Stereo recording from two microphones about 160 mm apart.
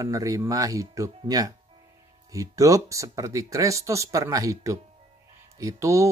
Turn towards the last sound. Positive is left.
turn(degrees=-20)  # may be behind; listen again after turning